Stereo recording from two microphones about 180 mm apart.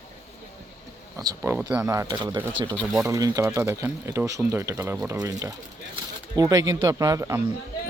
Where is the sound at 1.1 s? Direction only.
15° right (ahead or behind).